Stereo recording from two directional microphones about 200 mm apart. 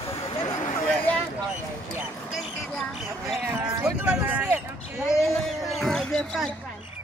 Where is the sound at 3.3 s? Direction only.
5° right (ahead or behind).